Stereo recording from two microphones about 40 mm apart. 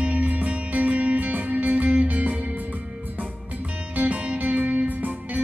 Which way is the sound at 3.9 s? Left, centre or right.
Right.